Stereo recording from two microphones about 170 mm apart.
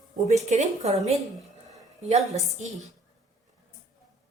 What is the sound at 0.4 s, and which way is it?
Speech, 45° right (ahead or behind).